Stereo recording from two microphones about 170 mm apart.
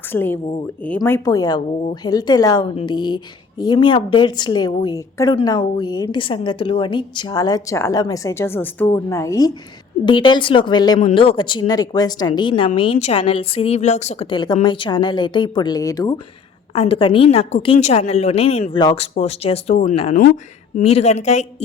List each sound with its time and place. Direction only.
0.1 s speech: 10° left (ahead or behind)
16.7 s a woman's voice: 35° left (ahead or behind)
18.7 s speech: 25° left (ahead or behind)
19.1 s a woman's voice: 35° left (ahead or behind)